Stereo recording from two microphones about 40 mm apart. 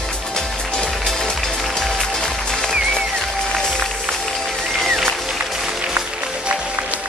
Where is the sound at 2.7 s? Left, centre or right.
Centre.